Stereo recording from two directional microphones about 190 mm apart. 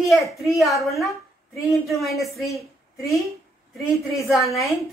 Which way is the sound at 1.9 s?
Centre (ahead or behind).